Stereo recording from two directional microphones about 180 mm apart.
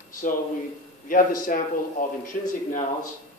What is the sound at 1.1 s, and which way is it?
A man's voice, 50° left (ahead or behind).